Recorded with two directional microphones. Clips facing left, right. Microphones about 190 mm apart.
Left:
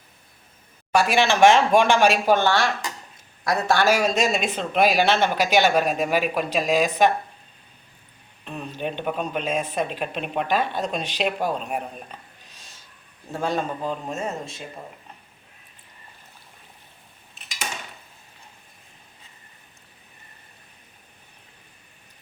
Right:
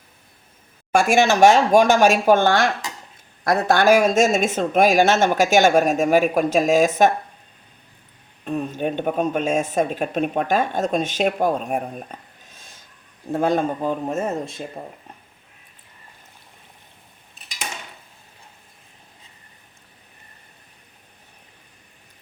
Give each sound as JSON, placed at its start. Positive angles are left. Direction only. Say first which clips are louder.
{"t": 0.9, "sound": "speech", "louder": "right 3 dB", "side_deg": -45}
{"t": 8.4, "sound": "speech", "louder": "right 6 dB", "side_deg": -45}
{"t": 12.5, "sound": "a sound", "louder": "right 2 dB", "side_deg": -50}
{"t": 13.3, "sound": "speech", "louder": "right 6 dB", "side_deg": -55}